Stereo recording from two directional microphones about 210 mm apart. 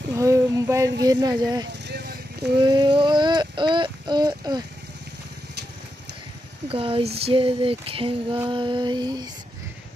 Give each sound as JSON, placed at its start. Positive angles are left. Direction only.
{"t": 0.1, "sound": "a sound", "side_deg": -15}
{"t": 1.0, "sound": "female singing", "side_deg": -20}
{"t": 1.7, "sound": "vehicle", "side_deg": -50}
{"t": 2.6, "sound": "speech", "side_deg": -20}
{"t": 6.7, "sound": "female singing", "side_deg": -25}